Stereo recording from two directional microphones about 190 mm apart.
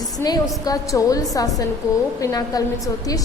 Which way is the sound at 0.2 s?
20° left (ahead or behind).